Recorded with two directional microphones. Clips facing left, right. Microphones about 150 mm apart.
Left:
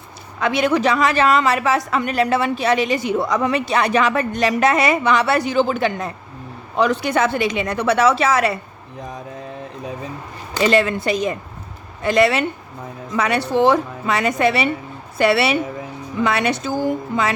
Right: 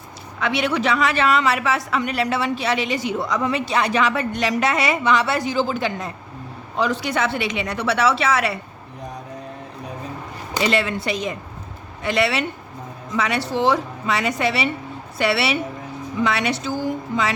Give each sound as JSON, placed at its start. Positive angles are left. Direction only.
{"t": 0.3, "sound": "a woman's voice", "side_deg": 45}
{"t": 10.6, "sound": "a woman's voice", "side_deg": 45}